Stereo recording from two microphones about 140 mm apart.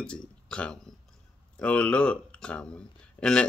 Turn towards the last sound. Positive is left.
turn(degrees=5)  # may be behind; listen again after turning